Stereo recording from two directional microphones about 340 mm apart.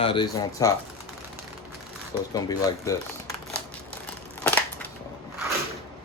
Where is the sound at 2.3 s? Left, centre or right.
Centre.